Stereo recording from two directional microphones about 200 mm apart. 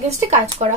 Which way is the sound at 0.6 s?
30° right (ahead or behind).